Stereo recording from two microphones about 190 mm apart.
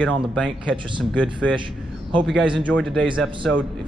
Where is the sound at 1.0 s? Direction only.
5° left (ahead or behind).